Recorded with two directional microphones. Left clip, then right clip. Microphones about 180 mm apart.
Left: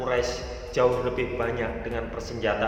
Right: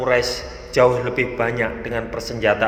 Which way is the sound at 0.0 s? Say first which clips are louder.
Right 7 dB; 30° right (ahead or behind).